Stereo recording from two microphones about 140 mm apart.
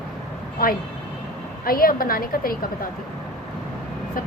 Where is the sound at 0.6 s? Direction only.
90° left.